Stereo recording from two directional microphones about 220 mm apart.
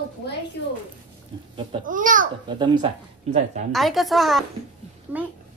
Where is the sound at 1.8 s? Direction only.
35° right (ahead or behind).